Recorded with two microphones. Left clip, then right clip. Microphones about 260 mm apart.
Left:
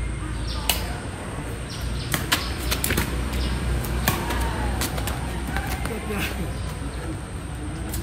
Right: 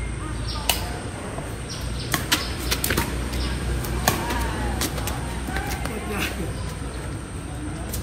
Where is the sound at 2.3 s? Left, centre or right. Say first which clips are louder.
Even; centre.